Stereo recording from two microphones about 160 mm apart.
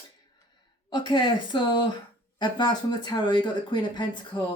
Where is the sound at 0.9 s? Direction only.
30° left (ahead or behind).